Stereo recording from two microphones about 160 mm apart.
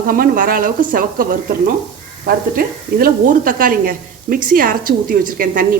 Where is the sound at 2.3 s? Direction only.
65° right (ahead or behind).